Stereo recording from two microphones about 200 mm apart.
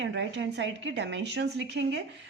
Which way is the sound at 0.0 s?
60° right (ahead or behind).